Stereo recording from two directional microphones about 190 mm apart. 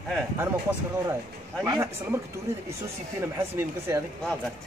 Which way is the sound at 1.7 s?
15° right (ahead or behind).